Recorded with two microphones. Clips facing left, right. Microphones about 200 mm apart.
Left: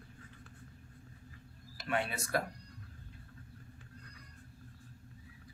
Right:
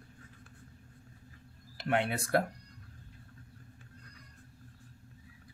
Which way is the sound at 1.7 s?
65° right (ahead or behind).